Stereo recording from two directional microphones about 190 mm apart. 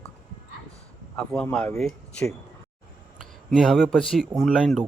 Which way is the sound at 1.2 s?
5° left (ahead or behind).